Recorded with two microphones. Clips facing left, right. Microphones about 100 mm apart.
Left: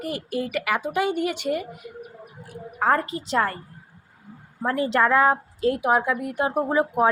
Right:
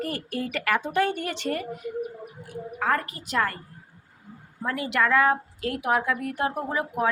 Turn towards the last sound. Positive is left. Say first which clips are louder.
# left 6 dB
turn(degrees=30)  # may be behind; listen again after turning